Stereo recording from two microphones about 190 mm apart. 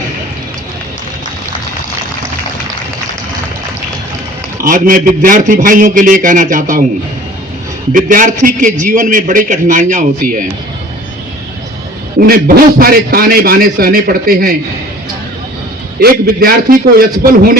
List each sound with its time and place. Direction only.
4.6 s a man's voice: 45° right (ahead or behind)
7.9 s a man's voice: 45° right (ahead or behind)
12.2 s a man's voice: 50° right (ahead or behind)
16.0 s a man's voice: 50° right (ahead or behind)